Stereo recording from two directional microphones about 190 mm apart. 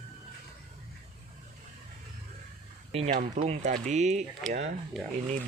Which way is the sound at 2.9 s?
35° right (ahead or behind).